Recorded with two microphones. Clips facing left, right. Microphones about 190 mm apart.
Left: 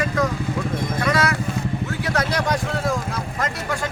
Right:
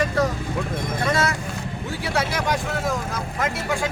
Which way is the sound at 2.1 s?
5° right (ahead or behind).